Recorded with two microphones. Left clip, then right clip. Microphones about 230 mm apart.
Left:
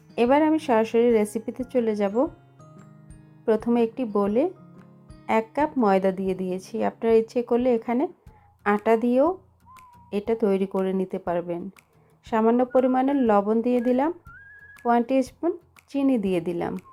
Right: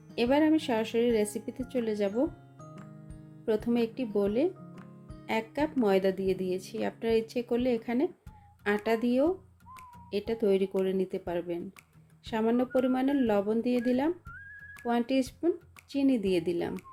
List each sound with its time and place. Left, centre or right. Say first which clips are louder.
0.2 s speech: left 6 dB; centre
3.4 s speech: left 7 dB; centre
6.4 s a woman's voice: left 3 dB; left
6.7 s speech: left 9 dB; centre
10.2 s speech: left 4 dB; centre